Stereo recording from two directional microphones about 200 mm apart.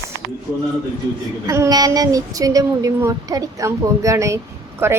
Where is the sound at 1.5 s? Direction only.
15° right (ahead or behind).